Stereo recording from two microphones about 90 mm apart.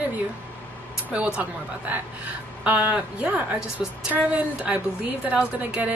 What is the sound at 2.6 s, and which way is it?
Speech, 20° right (ahead or behind).